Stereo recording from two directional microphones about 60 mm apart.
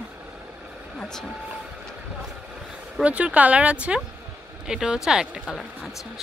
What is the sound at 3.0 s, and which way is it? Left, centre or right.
Speech, right.